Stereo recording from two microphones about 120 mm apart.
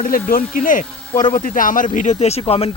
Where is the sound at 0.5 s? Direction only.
90° left.